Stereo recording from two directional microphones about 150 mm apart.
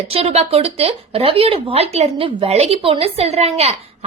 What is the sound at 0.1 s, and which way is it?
Speech, 40° right (ahead or behind).